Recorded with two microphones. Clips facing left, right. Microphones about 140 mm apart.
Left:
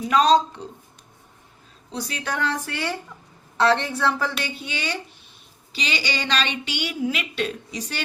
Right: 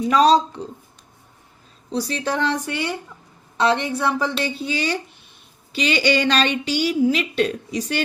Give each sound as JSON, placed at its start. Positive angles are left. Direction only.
{"t": 0.1, "sound": "speech", "side_deg": -35}
{"t": 1.9, "sound": "speech", "side_deg": -35}
{"t": 4.4, "sound": "a woman's voice", "side_deg": -35}